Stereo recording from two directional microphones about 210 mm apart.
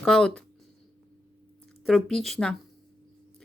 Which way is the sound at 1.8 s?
Centre (ahead or behind).